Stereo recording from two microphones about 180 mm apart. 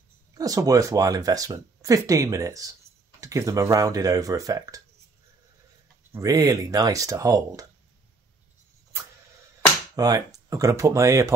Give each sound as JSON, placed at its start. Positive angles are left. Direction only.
{"t": 0.3, "sound": "speech", "side_deg": -20}
{"t": 6.1, "sound": "speech", "side_deg": -20}
{"t": 9.9, "sound": "speech", "side_deg": -20}